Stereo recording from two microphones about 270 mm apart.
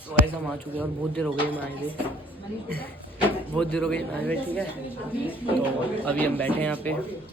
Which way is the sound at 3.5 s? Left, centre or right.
Centre.